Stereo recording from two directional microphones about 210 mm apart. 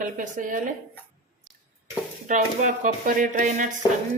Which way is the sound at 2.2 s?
35° right (ahead or behind).